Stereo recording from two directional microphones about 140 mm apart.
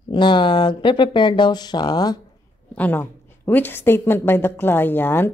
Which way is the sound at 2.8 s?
15° left (ahead or behind).